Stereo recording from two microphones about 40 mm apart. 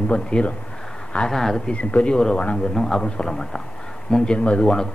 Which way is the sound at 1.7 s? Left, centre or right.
Left.